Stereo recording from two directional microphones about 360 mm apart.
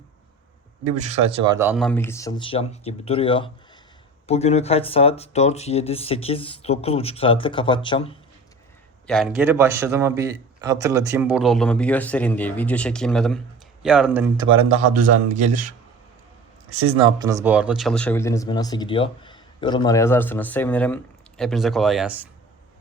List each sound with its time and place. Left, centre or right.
1.0 s speech: centre
9.0 s a man's voice: centre; by 15.7 s right
16.6 s speech: right
16.9 s speech: centre